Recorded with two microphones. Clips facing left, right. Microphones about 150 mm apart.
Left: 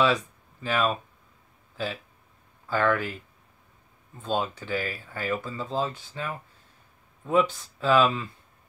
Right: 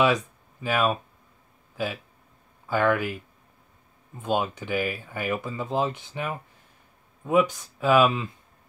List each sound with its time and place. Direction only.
0.0 s speech: 15° right (ahead or behind)
4.2 s speech: 15° right (ahead or behind)